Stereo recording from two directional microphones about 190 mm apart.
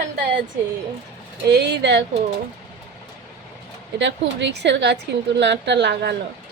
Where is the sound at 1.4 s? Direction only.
65° right (ahead or behind).